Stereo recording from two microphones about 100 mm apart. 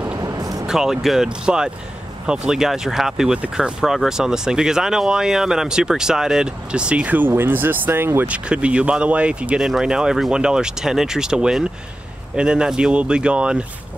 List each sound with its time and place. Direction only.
0.2 s vehicle: 40° right (ahead or behind)
0.7 s speech: 5° right (ahead or behind); by 8.4 s 20° right (ahead or behind)
8.5 s speech: 10° right (ahead or behind)